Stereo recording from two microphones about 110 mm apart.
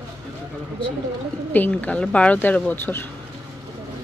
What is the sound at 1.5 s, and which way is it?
Speech, 15° left (ahead or behind).